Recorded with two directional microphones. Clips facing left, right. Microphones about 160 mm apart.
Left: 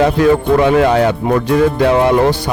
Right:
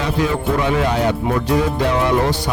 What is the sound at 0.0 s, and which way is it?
Speech, 55° left (ahead or behind).